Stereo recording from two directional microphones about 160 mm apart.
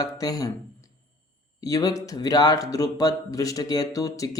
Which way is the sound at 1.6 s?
20° left (ahead or behind).